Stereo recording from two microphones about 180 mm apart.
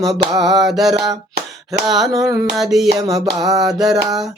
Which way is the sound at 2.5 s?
Centre (ahead or behind).